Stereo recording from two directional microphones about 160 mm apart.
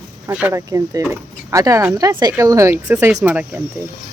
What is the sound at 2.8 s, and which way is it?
Speech, 5° right (ahead or behind).